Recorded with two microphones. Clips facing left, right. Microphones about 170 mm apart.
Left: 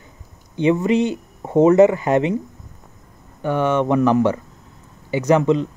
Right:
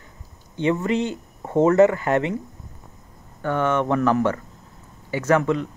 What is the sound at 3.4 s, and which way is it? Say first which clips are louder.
Speech: left 3 dB; 15° left (ahead or behind).